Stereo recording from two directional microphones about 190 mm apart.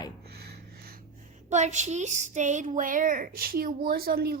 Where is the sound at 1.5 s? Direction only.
40° right (ahead or behind); by 4.4 s 55° right (ahead or behind).